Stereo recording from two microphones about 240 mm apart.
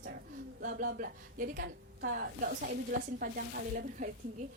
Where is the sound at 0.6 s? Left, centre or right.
Right.